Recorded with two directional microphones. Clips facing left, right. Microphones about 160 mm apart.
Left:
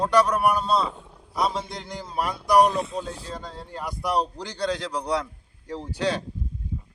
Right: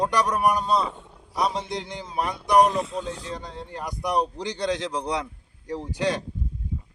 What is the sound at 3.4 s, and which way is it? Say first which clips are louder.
A man's voice: even; 20° right (ahead or behind).